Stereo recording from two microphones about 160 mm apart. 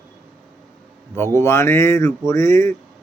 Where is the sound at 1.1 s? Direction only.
15° left (ahead or behind).